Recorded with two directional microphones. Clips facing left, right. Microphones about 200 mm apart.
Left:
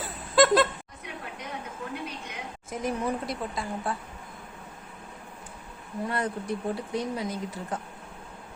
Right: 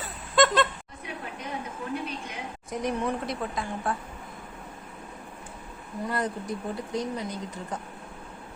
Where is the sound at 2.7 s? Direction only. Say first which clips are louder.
Right 1 dB; centre (ahead or behind).